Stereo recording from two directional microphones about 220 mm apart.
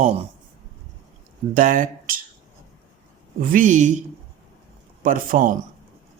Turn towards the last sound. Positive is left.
turn(degrees=-35)  # may be behind; listen again after turning